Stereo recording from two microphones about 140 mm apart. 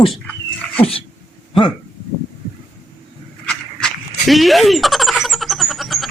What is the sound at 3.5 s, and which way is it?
Squeal, 5° left (ahead or behind).